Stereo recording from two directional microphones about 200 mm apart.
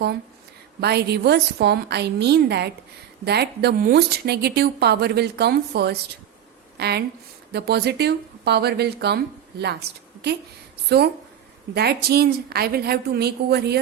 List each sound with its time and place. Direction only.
0.8 s speech: 55° right (ahead or behind)